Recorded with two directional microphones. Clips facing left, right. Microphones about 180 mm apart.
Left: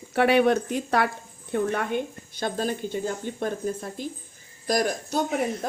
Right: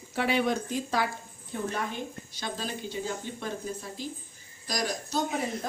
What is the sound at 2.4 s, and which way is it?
Speech, 50° left (ahead or behind).